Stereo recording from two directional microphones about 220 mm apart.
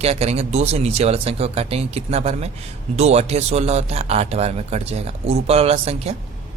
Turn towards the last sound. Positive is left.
turn(degrees=-25)  # may be behind; listen again after turning